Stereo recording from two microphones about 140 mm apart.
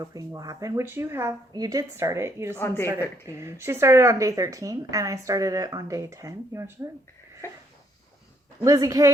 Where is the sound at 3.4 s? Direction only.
20° right (ahead or behind).